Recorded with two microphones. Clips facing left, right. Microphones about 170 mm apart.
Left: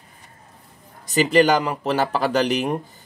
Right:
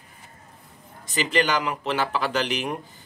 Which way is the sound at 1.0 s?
40° left (ahead or behind).